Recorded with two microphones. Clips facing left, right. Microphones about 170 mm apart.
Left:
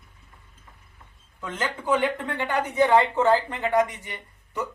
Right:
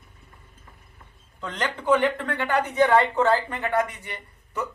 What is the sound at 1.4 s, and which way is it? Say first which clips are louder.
A woman's voice: right 1 dB; 5° left (ahead or behind).